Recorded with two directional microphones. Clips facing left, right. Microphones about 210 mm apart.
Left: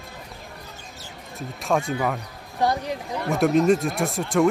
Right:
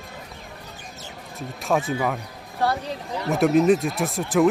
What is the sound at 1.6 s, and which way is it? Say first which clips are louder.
Speech: even; centre (ahead or behind).